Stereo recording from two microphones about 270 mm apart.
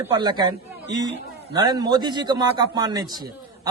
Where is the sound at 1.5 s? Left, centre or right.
Centre.